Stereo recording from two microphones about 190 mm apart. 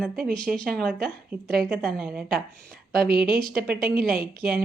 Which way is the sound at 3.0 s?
50° right (ahead or behind).